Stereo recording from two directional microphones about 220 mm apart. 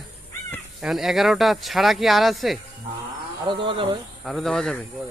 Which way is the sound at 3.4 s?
20° right (ahead or behind).